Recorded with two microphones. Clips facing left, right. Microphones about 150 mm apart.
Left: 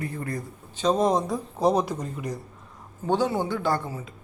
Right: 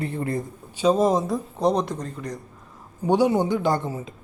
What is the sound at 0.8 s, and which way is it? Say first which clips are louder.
Speech: right 3 dB; 5° right (ahead or behind).